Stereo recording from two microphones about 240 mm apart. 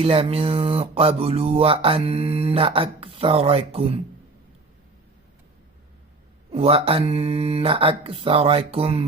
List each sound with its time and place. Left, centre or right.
0.0 s speech: right
6.5 s speech: right